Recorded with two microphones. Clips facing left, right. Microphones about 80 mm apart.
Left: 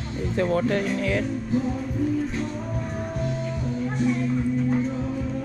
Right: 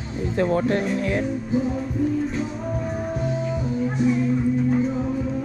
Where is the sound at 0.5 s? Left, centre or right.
Right.